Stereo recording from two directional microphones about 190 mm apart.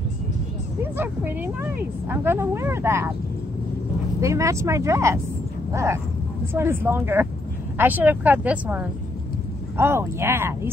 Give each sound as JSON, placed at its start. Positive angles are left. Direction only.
{"t": 0.9, "sound": "speech", "side_deg": -10}
{"t": 4.2, "sound": "speech", "side_deg": -15}